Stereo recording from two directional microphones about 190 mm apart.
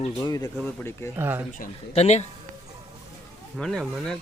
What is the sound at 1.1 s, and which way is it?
Speech, 10° right (ahead or behind).